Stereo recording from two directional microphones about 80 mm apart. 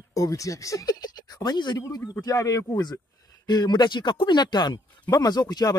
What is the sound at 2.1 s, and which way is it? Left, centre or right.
Speech, left.